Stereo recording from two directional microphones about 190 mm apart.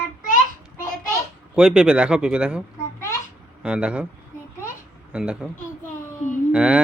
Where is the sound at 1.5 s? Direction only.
5° right (ahead or behind).